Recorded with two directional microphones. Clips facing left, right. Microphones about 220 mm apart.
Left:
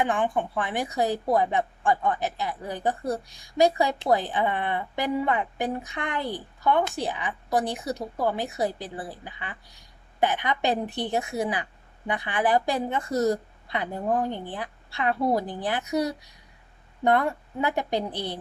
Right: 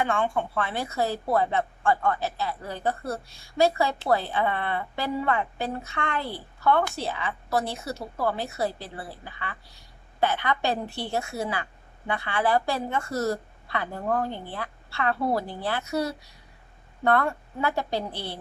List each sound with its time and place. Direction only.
0.0 s a woman's voice: 15° left (ahead or behind)